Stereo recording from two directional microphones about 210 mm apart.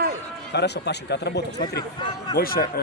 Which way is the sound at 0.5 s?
50° left (ahead or behind).